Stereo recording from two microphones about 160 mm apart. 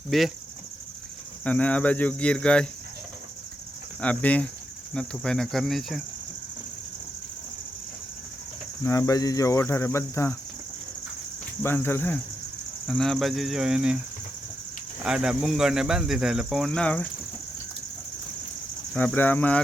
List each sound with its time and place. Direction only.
0.1 s speech: centre (ahead or behind)
1.5 s cricket: 10° left (ahead or behind)
4.0 s cricket: 10° left (ahead or behind)
4.9 s speech: 5° left (ahead or behind)
8.8 s cricket: 20° left (ahead or behind)
11.6 s cricket: 15° left (ahead or behind)
12.9 s speech: centre (ahead or behind)
15.0 s speech: 5° right (ahead or behind)
18.9 s cricket: 10° left (ahead or behind)